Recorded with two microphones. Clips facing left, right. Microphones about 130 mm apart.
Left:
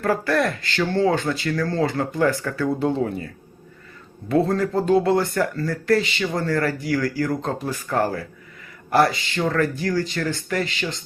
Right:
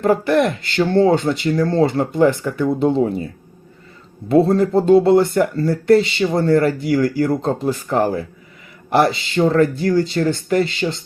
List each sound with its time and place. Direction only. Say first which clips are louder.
0.0 s speech: right 5 dB; 20° right (ahead or behind)